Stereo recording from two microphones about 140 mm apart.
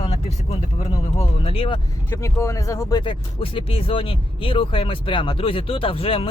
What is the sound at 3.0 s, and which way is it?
Speech, 35° left (ahead or behind).